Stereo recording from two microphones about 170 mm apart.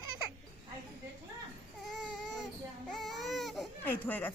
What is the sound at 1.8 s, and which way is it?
Baby cry, centre (ahead or behind).